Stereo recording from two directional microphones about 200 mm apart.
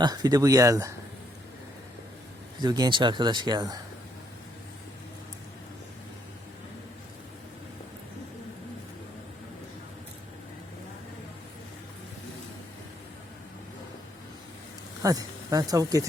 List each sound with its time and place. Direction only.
0.0 s speech: 20° right (ahead or behind)
2.6 s speech: 20° right (ahead or behind)
15.0 s speech: 20° right (ahead or behind)